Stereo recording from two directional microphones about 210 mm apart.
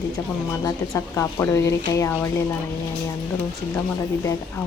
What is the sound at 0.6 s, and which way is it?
Speech, 15° left (ahead or behind).